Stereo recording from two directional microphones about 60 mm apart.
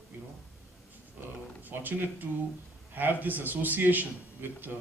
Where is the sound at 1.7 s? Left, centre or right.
Right.